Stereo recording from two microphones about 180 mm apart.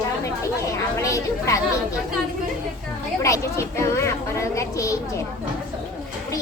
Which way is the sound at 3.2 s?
15° left (ahead or behind).